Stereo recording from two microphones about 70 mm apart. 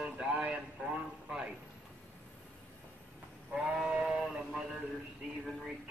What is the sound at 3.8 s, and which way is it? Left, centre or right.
Speech, centre.